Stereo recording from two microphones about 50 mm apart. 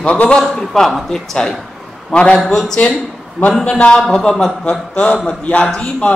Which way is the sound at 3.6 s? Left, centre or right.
Left.